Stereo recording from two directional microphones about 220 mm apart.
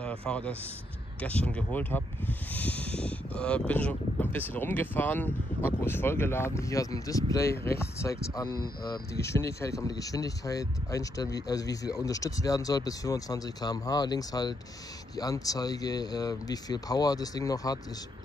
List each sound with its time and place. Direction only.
0.0 s a man's voice: 5° left (ahead or behind)